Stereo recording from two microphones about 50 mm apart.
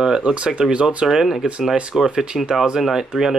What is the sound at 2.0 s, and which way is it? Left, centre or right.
Speech, centre.